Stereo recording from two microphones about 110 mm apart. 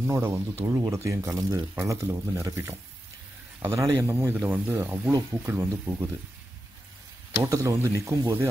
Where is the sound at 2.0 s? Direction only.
15° right (ahead or behind).